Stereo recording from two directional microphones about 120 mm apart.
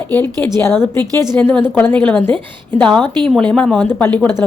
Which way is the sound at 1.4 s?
15° left (ahead or behind).